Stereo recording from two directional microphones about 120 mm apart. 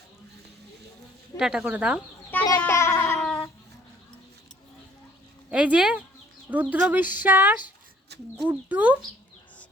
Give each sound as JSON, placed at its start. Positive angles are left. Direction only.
{"t": 1.4, "sound": "speech", "side_deg": -5}
{"t": 2.6, "sound": "cat", "side_deg": 20}
{"t": 3.2, "sound": "cat", "side_deg": 5}
{"t": 5.5, "sound": "speech", "side_deg": -10}